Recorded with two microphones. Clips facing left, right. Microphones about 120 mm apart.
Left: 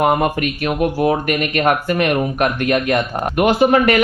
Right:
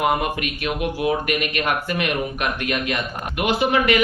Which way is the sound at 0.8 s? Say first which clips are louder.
Left 6 dB; 45° left (ahead or behind).